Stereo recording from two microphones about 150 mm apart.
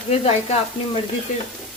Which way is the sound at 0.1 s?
45° left (ahead or behind).